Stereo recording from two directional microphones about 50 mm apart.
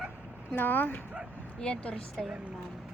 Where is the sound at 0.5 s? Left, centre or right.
Left.